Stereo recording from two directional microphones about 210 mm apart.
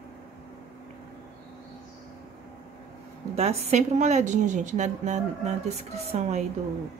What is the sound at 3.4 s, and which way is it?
A woman's voice, 30° right (ahead or behind).